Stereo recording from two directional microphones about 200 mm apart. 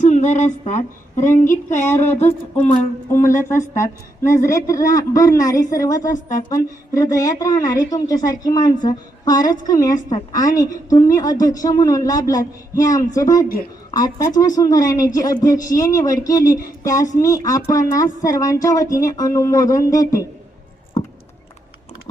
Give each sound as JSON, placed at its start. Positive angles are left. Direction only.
{"t": 0.0, "sound": "speech", "side_deg": 35}
{"t": 2.0, "sound": "a woman's voice", "side_deg": 10}